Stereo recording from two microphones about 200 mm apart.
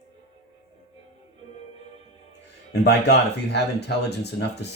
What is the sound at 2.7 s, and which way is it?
Speech, 55° left (ahead or behind).